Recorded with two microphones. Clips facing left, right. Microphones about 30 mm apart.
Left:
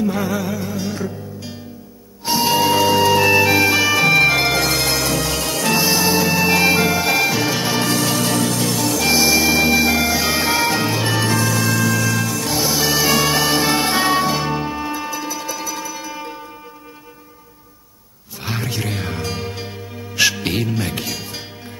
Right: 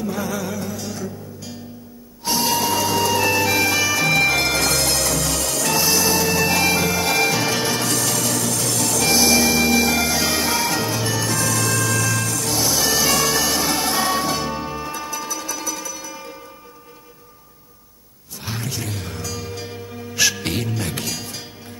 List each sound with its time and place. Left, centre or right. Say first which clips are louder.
0.0 s music: left 4 dB; left
7.7 s music: left 4 dB; left
11.3 s music: left 3 dB; centre
18.4 s music: left 4 dB; left